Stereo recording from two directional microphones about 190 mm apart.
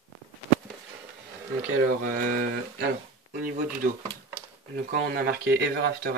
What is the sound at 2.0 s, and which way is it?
Speech, 45° right (ahead or behind).